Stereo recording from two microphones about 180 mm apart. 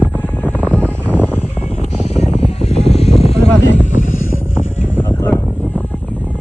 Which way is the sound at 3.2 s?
35° left (ahead or behind).